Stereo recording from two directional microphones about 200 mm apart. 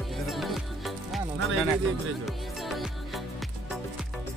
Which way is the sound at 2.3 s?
Centre (ahead or behind).